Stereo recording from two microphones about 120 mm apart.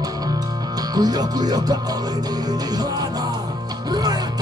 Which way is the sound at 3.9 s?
35° right (ahead or behind).